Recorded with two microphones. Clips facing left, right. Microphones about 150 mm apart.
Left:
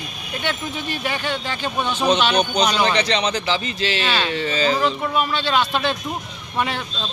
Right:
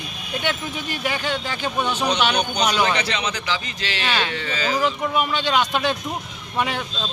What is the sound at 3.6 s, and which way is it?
Speech, 15° right (ahead or behind).